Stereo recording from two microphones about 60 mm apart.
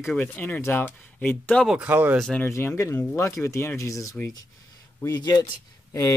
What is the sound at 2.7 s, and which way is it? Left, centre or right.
Speech, left.